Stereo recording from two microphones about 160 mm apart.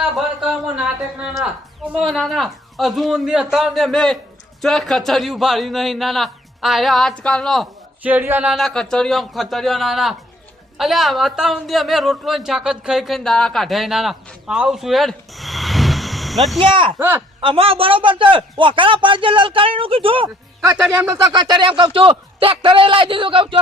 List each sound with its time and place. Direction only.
0.0 s speech: 5° right (ahead or behind)
8.0 s speech: 10° right (ahead or behind)
16.6 s a man's voice: 30° right (ahead or behind)
17.0 s speech: 15° right (ahead or behind)
17.4 s a man's voice: 35° right (ahead or behind)
20.2 s speech: 15° right (ahead or behind)
21.3 s a man's voice: 30° right (ahead or behind)